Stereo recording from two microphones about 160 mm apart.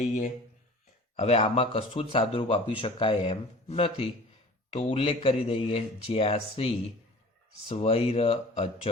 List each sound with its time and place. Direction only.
1.1 s speech: 40° left (ahead or behind)